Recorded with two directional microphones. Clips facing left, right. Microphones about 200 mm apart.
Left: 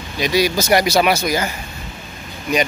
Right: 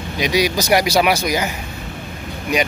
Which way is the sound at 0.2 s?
15° right (ahead or behind).